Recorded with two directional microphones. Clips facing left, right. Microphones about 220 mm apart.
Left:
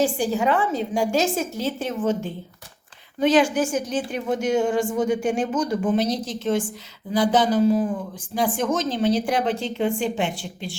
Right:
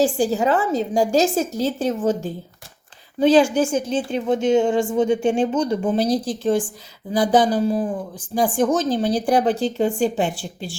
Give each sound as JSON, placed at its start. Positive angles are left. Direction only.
{"t": 0.0, "sound": "a woman's voice", "side_deg": -35}